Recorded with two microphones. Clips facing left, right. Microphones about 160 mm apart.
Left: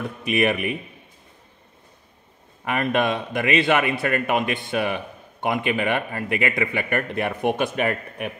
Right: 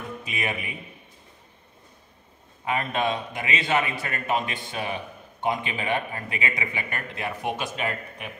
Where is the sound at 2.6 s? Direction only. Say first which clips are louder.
Left 4 dB; 65° left (ahead or behind).